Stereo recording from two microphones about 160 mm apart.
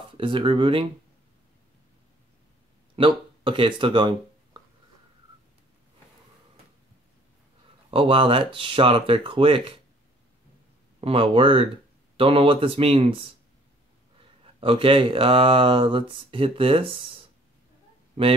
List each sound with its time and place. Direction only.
0.2 s speech: 30° right (ahead or behind)
3.0 s speech: 30° right (ahead or behind)
4.6 s a sound: 25° right (ahead or behind)
7.9 s speech: 35° right (ahead or behind)
11.0 s speech: 35° right (ahead or behind)
14.4 s speech: 35° right (ahead or behind)
18.2 s speech: 35° right (ahead or behind)